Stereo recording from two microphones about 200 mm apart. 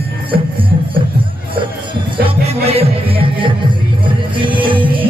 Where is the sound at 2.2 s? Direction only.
30° right (ahead or behind).